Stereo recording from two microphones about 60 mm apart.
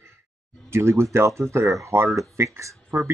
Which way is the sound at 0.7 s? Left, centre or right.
Right.